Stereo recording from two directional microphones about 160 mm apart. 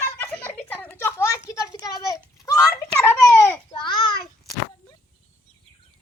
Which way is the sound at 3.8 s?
30° left (ahead or behind).